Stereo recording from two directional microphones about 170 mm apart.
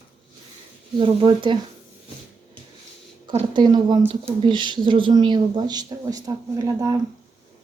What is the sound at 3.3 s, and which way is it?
Speech, 25° right (ahead or behind).